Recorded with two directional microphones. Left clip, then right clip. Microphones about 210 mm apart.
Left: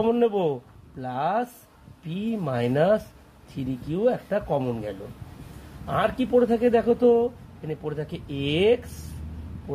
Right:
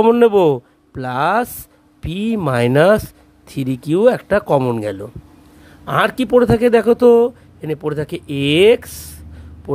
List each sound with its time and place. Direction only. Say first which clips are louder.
0.0 s speech: right 11 dB; 50° right (ahead or behind)